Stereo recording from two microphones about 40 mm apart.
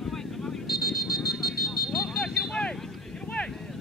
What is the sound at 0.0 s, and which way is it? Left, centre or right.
Vehicle, centre.